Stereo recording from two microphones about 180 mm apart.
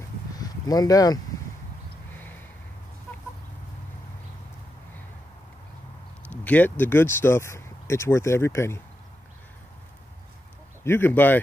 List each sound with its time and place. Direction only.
0.4 s speech: 20° left (ahead or behind)
6.3 s speech: 10° left (ahead or behind)
10.8 s speech: 10° left (ahead or behind)